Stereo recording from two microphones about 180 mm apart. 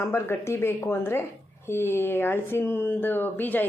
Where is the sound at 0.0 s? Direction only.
15° left (ahead or behind).